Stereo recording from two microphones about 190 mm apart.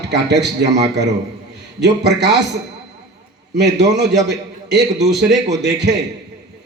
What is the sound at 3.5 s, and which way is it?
A man's voice, 65° right (ahead or behind).